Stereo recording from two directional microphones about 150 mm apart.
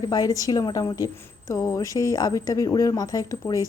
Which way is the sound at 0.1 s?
25° left (ahead or behind).